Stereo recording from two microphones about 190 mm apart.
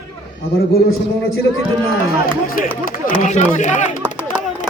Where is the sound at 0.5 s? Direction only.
55° left (ahead or behind).